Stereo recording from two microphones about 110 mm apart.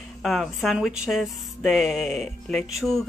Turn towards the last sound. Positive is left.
turn(degrees=0)  # may be behind; listen again after turning